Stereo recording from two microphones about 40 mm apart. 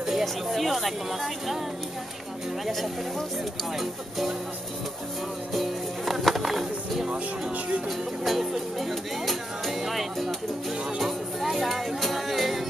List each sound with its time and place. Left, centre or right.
0.2 s speech: centre
2.6 s speech: centre
5.5 s music: centre
7.1 s speech: right
8.2 s speech: centre
11.0 s music: centre